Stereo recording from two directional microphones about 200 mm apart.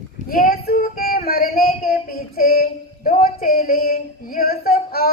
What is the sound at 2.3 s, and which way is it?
Speech, 45° left (ahead or behind).